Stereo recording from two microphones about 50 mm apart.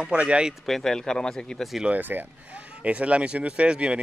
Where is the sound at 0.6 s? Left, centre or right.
Centre.